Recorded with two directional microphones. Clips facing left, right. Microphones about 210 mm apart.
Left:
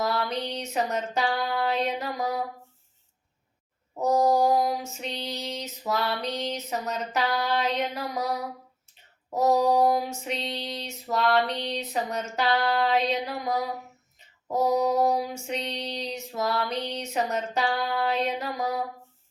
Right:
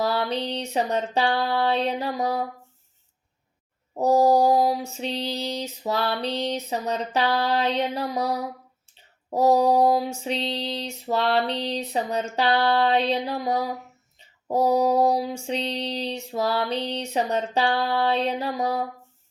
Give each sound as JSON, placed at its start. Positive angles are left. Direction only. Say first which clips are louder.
{"t": 0.0, "sound": "female singing", "louder": "right 3 dB", "side_deg": -30}
{"t": 3.9, "sound": "female singing", "louder": "right 4 dB", "side_deg": -35}
{"t": 9.3, "sound": "a sound", "louder": "right 3 dB", "side_deg": -30}
{"t": 10.2, "sound": "female singing", "louder": "right 5 dB", "side_deg": -30}